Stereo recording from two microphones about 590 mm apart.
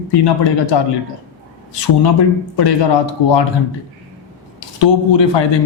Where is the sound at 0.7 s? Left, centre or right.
Left.